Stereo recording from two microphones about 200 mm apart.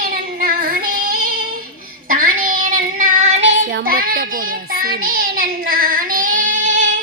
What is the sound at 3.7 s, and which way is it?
Child singing, 45° right (ahead or behind).